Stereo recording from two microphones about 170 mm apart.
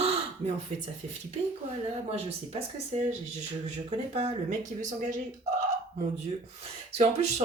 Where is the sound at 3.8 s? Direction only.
40° right (ahead or behind).